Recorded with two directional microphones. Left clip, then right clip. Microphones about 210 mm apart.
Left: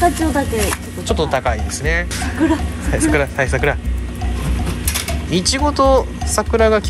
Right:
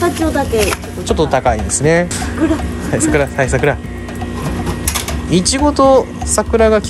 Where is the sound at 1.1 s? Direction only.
20° right (ahead or behind).